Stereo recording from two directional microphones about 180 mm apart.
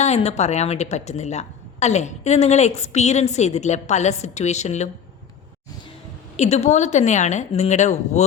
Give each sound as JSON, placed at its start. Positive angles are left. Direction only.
{"t": 0.0, "sound": "a woman's voice", "side_deg": 35}
{"t": 6.3, "sound": "a woman's voice", "side_deg": 40}